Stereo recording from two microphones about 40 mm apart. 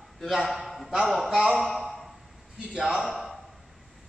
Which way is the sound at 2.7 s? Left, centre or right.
Centre.